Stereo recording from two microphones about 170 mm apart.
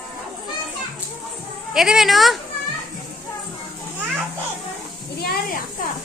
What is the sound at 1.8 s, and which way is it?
Speech, centre (ahead or behind).